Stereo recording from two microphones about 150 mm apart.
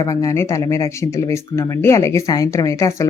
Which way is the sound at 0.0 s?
20° left (ahead or behind).